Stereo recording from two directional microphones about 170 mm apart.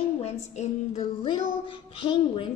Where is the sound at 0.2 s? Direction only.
40° left (ahead or behind).